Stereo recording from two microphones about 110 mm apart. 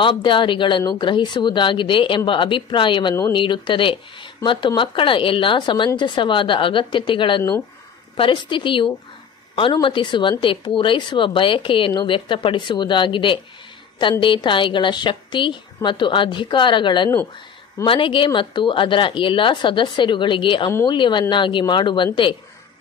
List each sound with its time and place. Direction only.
0.0 s speech: 50° left (ahead or behind)